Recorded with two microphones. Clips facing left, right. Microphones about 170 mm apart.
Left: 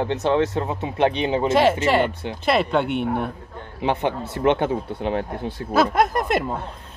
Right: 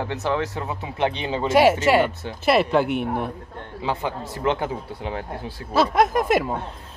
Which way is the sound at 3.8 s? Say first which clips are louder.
Left 4 dB; 20° left (ahead or behind).